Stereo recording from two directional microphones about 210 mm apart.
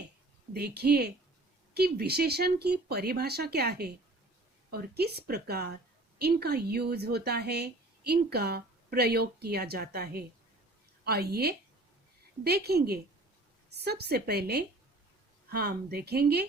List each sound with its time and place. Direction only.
0.5 s a woman's voice: 50° right (ahead or behind)